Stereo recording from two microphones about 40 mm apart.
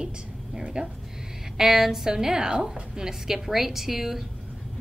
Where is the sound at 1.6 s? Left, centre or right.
Centre.